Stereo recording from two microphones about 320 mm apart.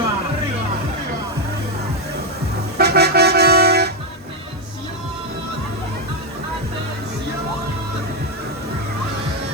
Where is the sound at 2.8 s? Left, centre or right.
Right.